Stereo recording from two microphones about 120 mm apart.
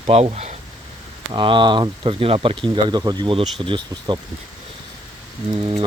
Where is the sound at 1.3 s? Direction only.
45° right (ahead or behind).